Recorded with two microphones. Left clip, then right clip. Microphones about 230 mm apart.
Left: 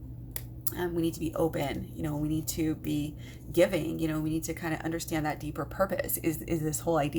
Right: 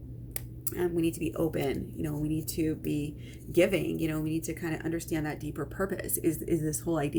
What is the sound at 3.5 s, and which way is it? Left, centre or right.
A woman's voice, left.